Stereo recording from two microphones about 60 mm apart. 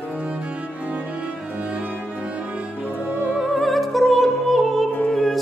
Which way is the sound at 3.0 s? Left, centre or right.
Centre.